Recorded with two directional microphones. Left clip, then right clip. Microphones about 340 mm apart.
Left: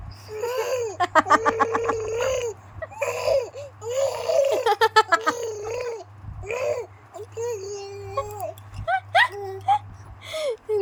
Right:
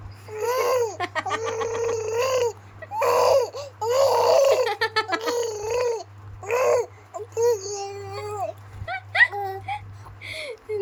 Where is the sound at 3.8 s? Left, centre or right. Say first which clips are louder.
Right 6 dB; centre.